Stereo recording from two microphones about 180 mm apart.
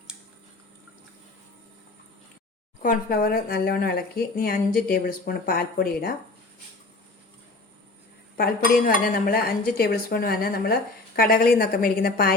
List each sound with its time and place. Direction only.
2.8 s speech: 55° left (ahead or behind)
8.9 s a woman's voice: 50° left (ahead or behind)